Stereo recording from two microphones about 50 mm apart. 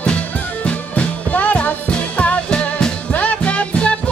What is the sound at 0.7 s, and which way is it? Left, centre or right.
Music, left.